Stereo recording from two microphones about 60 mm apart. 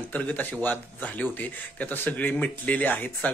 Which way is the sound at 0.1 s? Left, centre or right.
Left.